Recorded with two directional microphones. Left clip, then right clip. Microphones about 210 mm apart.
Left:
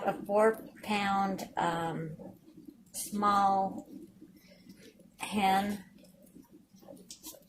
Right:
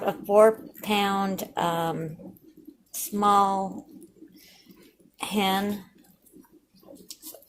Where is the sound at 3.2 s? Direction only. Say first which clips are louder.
Right 6 dB; 40° right (ahead or behind).